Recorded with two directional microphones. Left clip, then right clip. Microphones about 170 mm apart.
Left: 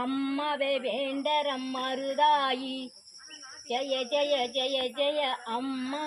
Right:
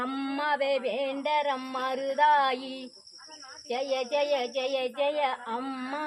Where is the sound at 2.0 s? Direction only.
10° right (ahead or behind).